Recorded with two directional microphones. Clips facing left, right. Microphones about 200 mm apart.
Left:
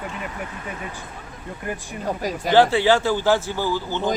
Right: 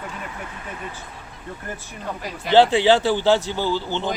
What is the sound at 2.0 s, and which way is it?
Speech, 40° left (ahead or behind).